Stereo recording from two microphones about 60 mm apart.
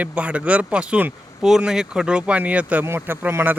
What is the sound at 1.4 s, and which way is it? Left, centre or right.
Speech, centre.